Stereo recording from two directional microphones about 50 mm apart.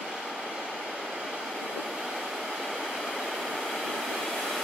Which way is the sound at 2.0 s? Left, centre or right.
Centre.